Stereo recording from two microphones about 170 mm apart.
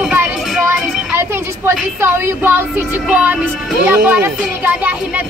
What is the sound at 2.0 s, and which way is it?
Speech, 15° right (ahead or behind).